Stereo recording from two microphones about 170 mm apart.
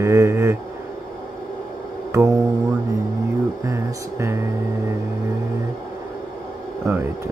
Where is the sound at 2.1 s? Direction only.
15° right (ahead or behind).